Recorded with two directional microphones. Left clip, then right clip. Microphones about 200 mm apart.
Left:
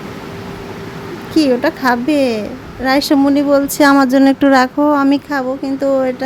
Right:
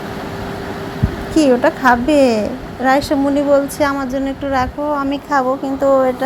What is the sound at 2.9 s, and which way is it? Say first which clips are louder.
Speech: left 2 dB; 30° left (ahead or behind).